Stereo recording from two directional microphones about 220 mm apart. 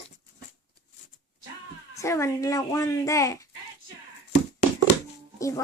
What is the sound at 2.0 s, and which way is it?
Speech, 15° left (ahead or behind).